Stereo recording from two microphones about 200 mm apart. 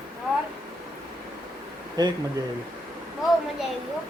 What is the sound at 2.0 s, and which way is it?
Speech, 20° right (ahead or behind).